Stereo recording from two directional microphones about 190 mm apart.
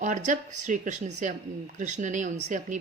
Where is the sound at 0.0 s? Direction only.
40° right (ahead or behind).